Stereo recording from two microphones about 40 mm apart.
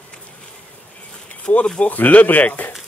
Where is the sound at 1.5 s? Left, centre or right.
Left.